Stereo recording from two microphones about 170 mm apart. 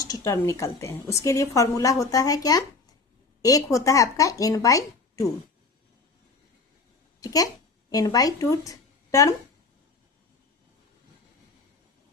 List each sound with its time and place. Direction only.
0.1 s a woman's voice: 20° left (ahead or behind)
7.2 s a woman's voice: 20° left (ahead or behind)